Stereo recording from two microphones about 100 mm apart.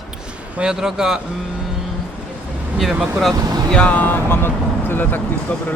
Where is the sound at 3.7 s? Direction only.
10° left (ahead or behind).